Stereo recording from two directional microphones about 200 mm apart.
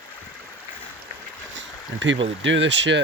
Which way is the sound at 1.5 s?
65° right (ahead or behind).